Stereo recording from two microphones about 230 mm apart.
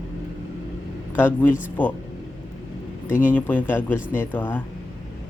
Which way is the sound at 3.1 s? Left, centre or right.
Left.